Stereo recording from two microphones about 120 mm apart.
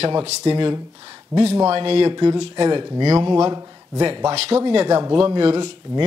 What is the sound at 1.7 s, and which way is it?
A man's voice, 50° right (ahead or behind).